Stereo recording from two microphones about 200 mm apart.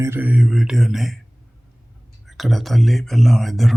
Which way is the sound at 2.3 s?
Centre (ahead or behind).